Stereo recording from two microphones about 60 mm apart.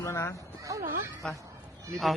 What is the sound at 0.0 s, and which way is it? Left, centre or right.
Speech, left.